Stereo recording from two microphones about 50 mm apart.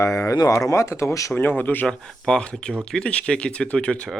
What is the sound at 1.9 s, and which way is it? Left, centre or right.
Speech, centre.